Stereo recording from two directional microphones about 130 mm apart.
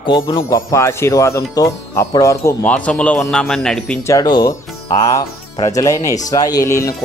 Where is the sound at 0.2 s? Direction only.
30° left (ahead or behind).